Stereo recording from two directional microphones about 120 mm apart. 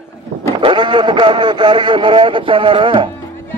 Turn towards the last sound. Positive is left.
turn(degrees=-45)  # may be behind; listen again after turning